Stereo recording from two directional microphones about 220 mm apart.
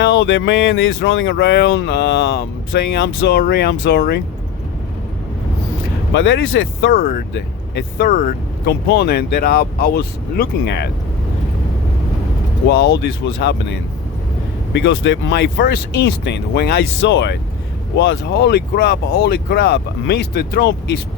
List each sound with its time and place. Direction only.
0.0 s speech: 55° left (ahead or behind)
6.1 s speech: 55° left (ahead or behind)
6.9 s speech: 40° left (ahead or behind)
12.6 s speech: 50° left (ahead or behind)
14.7 s speech: 50° left (ahead or behind)